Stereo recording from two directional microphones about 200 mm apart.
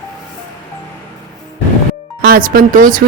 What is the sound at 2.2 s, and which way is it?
Speech, 45° right (ahead or behind).